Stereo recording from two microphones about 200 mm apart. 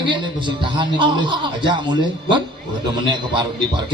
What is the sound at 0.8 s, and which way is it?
Speech, 25° right (ahead or behind).